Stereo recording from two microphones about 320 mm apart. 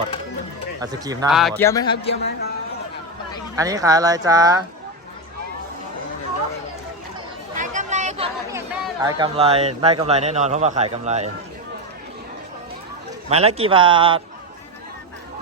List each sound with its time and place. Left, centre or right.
0.8 s a man's voice: centre
2.0 s a man's voice: left
3.5 s speech: centre
7.5 s chatter: right
8.5 s speech: centre
13.3 s speech: centre